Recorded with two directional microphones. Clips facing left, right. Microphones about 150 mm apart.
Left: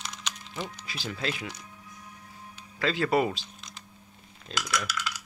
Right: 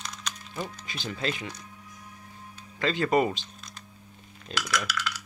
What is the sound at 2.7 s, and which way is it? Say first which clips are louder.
Speech: right 1 dB; 5° left (ahead or behind).